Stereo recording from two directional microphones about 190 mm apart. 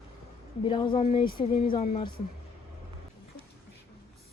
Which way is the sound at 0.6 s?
25° left (ahead or behind).